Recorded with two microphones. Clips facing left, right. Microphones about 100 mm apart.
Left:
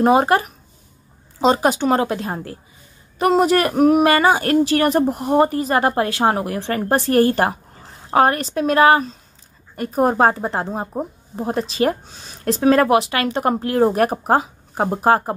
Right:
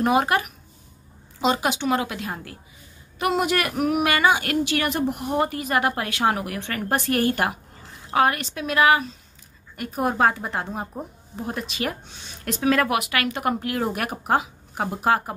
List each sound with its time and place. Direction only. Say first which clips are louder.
0.0 s speech: left 6 dB; 30° left (ahead or behind)